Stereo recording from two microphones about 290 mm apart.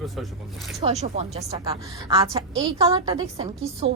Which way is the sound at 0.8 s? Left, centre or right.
Right.